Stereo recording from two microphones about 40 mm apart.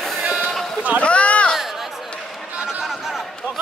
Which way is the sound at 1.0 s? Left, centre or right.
Left.